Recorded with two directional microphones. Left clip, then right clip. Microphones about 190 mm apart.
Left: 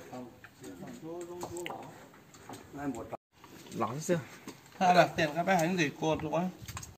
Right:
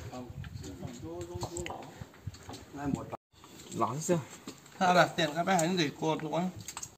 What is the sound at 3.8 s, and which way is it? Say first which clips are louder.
Speech: right 3 dB; 50° right (ahead or behind).